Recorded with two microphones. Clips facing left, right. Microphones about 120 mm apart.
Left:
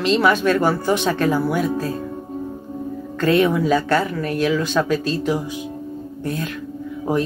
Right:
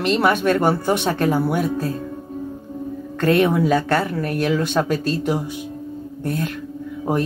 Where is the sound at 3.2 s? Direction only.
55° right (ahead or behind).